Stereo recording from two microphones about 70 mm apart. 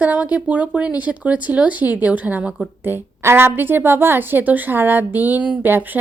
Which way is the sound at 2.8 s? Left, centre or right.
Right.